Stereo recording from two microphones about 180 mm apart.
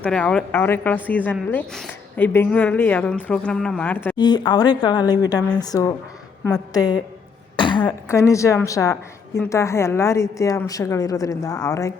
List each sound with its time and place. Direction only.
0.0 s a woman's voice: 5° left (ahead or behind)
4.2 s speech: 25° left (ahead or behind)
7.5 s throat clearing: 25° left (ahead or behind)
7.8 s a woman's voice: 15° left (ahead or behind)